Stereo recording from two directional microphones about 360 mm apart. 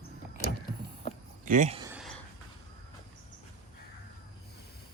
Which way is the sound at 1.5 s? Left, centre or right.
Centre.